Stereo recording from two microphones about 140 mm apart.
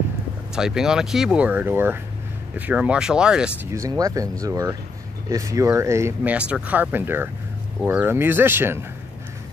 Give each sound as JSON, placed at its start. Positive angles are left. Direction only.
{"t": 0.6, "sound": "speech", "side_deg": -5}
{"t": 4.0, "sound": "speech", "side_deg": -25}
{"t": 6.3, "sound": "speech", "side_deg": -10}